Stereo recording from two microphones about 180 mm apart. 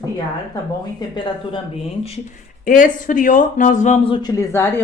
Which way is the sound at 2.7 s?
45° left (ahead or behind).